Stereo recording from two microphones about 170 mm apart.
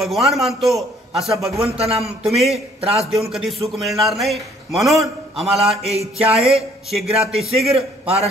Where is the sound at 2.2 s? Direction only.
Centre (ahead or behind).